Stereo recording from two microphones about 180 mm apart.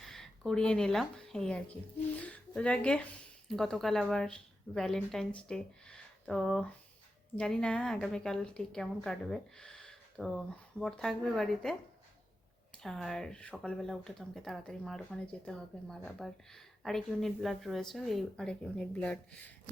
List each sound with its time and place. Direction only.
0.0 s speech: centre (ahead or behind)